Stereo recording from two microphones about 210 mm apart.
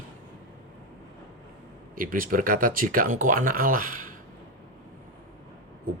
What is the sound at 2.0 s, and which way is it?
A man's voice, 40° right (ahead or behind).